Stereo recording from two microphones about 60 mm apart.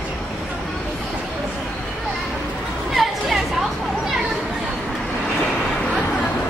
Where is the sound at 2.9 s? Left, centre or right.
Centre.